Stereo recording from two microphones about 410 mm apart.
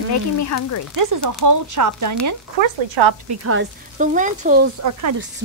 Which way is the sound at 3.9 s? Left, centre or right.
Centre.